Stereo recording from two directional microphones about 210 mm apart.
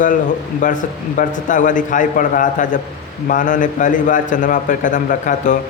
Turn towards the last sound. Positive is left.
turn(degrees=35)  # may be behind; listen again after turning